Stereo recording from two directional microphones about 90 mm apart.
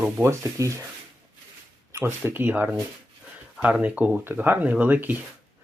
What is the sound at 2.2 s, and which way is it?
Speech, 25° right (ahead or behind).